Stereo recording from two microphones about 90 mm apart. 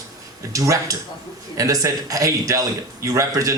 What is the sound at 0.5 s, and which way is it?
Speech, 40° right (ahead or behind).